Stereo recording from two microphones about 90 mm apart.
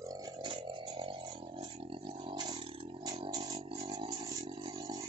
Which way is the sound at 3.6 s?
80° right.